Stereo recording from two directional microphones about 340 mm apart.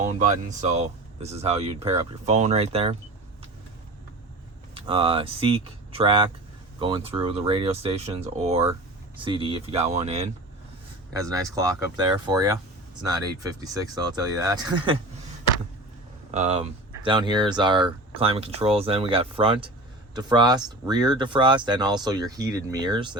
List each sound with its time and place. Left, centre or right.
0.0 s speech: right
4.7 s speech: centre
16.3 s speech: centre